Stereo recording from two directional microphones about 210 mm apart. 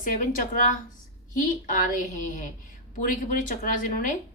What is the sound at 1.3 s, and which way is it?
Speech, 40° left (ahead or behind).